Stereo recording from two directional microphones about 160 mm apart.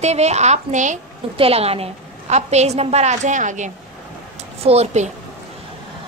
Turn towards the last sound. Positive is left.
turn(degrees=-45)  # may be behind; listen again after turning